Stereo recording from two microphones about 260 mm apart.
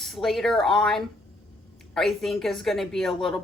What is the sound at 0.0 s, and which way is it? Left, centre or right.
Speech, centre.